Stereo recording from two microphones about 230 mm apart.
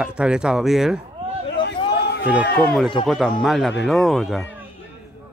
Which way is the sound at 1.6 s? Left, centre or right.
Left.